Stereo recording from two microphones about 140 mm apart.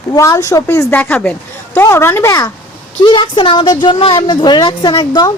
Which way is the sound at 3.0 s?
35° left (ahead or behind).